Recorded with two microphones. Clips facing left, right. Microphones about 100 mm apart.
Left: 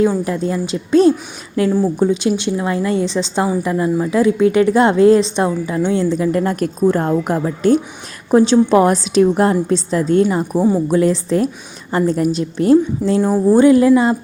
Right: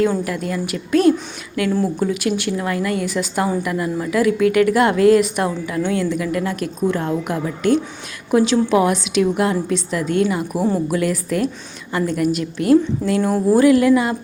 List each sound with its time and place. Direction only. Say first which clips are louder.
0.3 s a woman's voice: left 4 dB; 25° left (ahead or behind)
1.7 s speech: left 3 dB; 15° left (ahead or behind)
2.0 s a woman's voice: left 4 dB; 25° left (ahead or behind)